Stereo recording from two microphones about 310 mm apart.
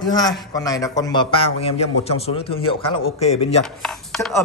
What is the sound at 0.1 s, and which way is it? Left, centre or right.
A man's voice, centre.